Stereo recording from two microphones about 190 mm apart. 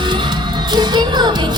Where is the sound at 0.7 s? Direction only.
25° right (ahead or behind).